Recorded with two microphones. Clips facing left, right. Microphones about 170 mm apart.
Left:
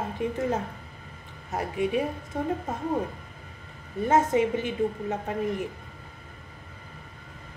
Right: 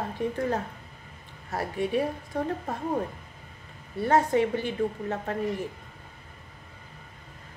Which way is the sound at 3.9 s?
20° left (ahead or behind).